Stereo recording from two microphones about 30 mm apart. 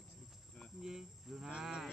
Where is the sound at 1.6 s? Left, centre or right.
Centre.